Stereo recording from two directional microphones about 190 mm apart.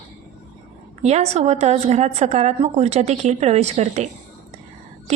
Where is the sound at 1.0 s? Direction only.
35° right (ahead or behind).